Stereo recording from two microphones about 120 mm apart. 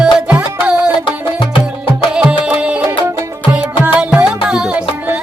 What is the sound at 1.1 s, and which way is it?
Music, 45° left (ahead or behind).